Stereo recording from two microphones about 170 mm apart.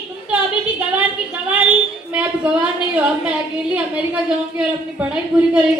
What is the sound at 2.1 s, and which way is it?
A woman's voice, 10° right (ahead or behind).